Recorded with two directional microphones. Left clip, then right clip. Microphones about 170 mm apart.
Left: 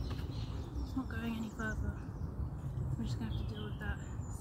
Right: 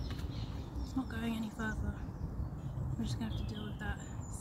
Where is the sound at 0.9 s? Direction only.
60° right (ahead or behind).